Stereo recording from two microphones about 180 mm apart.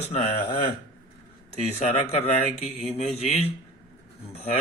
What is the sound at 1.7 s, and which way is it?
A man's voice, 35° left (ahead or behind).